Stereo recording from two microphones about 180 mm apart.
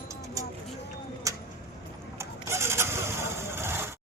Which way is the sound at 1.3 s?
20° right (ahead or behind).